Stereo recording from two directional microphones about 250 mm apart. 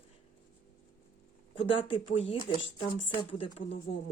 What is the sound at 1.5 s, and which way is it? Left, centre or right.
Speech, left.